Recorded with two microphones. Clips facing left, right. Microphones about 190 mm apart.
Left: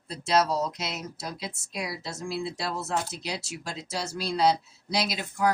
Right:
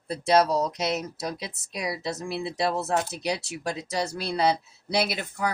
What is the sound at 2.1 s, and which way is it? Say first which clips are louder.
Speech: right 2 dB; 60° right (ahead or behind).